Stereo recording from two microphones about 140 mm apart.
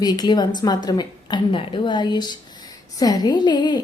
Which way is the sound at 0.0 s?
30° left (ahead or behind).